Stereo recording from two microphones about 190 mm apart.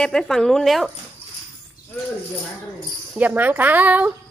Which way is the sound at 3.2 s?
10° right (ahead or behind).